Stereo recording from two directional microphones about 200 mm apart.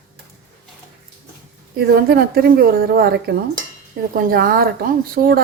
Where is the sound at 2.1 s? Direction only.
50° right (ahead or behind).